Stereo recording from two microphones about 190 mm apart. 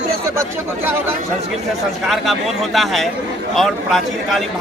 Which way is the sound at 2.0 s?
Centre (ahead or behind).